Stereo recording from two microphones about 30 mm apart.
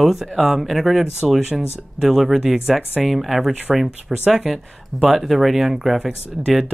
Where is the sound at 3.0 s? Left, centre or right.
Centre.